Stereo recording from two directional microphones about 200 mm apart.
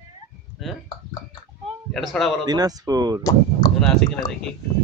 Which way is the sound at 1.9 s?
Centre (ahead or behind).